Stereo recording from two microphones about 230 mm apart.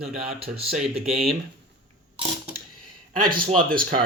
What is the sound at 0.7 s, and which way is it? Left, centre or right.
Speech, centre.